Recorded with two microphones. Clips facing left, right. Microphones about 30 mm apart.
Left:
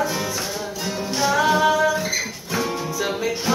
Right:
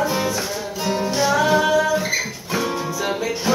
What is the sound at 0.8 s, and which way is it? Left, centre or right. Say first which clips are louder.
Music: right 8 dB; centre.